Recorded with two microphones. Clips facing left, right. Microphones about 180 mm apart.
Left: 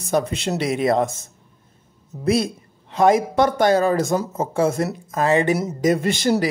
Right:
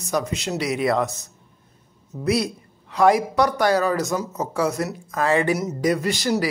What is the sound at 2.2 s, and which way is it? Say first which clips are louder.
Speech: left 2 dB; 25° left (ahead or behind).